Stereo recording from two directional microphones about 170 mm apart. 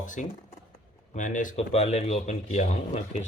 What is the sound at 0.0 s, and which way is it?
A man's voice, 50° left (ahead or behind).